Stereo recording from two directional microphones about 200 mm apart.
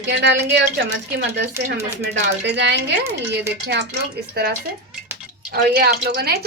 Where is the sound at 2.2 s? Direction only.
60° right (ahead or behind).